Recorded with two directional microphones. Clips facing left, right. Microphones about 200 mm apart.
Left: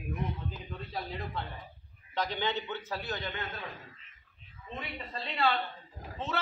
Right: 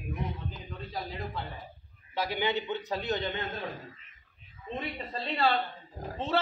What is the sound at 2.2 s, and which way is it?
A man's voice, 10° right (ahead or behind).